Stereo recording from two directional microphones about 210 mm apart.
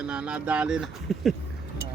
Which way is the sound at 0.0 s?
5° right (ahead or behind).